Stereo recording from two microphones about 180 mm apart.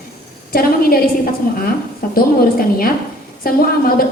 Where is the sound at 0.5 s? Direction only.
55° left (ahead or behind).